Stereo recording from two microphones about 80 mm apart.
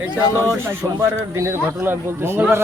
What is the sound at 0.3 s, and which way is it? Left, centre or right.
Speech, right.